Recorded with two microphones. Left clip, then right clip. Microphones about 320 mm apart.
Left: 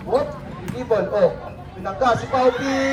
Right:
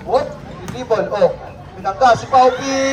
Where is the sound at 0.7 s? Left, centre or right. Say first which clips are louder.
Right 2 dB; right.